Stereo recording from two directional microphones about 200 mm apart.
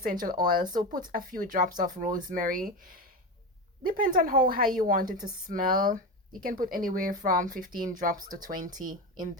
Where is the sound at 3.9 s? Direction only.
45° right (ahead or behind).